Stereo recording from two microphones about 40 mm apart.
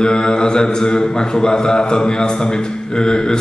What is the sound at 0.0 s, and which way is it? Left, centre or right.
Speech, left.